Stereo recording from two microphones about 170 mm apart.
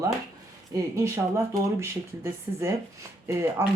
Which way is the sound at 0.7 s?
20° right (ahead or behind).